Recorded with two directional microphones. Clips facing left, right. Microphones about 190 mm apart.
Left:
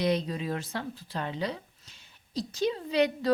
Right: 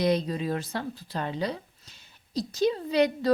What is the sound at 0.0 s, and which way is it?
A woman's voice, 40° right (ahead or behind).